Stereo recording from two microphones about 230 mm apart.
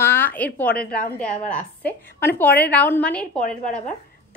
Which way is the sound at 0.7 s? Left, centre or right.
Left.